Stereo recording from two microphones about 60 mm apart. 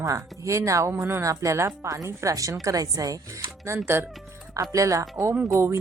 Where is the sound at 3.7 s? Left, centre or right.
Right.